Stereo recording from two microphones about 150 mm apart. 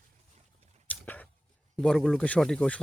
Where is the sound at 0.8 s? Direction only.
10° left (ahead or behind).